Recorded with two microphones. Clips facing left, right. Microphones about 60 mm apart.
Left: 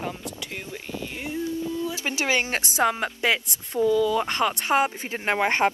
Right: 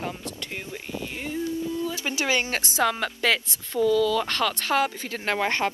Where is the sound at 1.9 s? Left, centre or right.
Left.